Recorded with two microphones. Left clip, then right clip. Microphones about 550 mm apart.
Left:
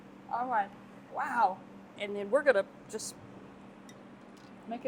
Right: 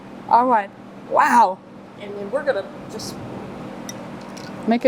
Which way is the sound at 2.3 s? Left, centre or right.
Left.